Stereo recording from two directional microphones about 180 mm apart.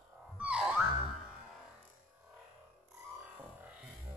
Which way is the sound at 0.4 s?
5° right (ahead or behind).